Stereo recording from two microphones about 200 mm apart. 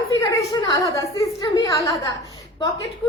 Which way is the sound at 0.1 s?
15° left (ahead or behind).